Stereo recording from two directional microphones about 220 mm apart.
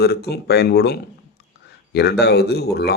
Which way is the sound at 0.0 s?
45° left (ahead or behind).